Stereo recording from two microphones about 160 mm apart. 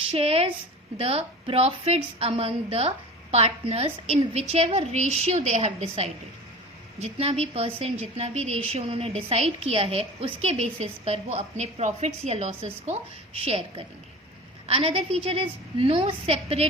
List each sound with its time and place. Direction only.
0.1 s a woman's voice: 40° right (ahead or behind)